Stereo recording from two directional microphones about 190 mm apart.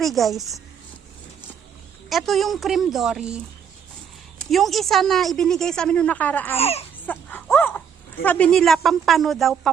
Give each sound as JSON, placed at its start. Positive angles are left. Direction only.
{"t": 0.0, "sound": "a woman's voice", "side_deg": 0}
{"t": 2.0, "sound": "a woman's voice", "side_deg": 0}
{"t": 4.4, "sound": "a woman's voice", "side_deg": 0}
{"t": 6.6, "sound": "speech", "side_deg": 30}
{"t": 7.0, "sound": "dog", "side_deg": 10}
{"t": 8.2, "sound": "a woman's voice", "side_deg": 5}